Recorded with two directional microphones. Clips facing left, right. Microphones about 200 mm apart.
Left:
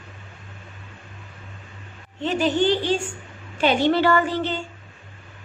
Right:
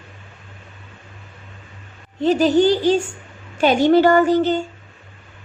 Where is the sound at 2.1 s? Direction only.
40° right (ahead or behind).